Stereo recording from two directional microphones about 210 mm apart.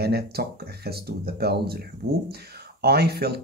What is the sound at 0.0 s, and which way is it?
Speech, 50° right (ahead or behind).